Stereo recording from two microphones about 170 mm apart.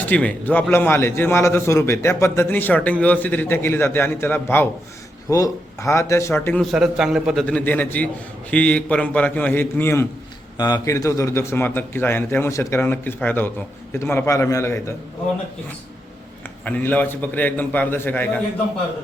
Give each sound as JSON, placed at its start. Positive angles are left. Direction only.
{"t": 0.0, "sound": "a man's voice", "side_deg": 10}
{"t": 6.6, "sound": "a man's voice", "side_deg": 0}
{"t": 16.6, "sound": "a man's voice", "side_deg": 10}